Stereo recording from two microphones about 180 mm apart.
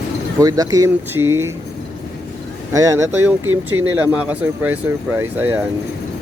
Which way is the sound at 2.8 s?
15° right (ahead or behind).